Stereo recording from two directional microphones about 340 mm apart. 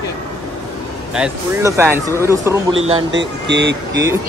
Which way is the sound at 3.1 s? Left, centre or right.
Right.